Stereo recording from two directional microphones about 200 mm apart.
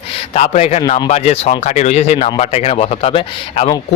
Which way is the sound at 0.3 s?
35° left (ahead or behind).